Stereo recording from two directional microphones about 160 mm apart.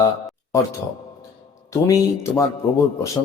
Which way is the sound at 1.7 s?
20° left (ahead or behind).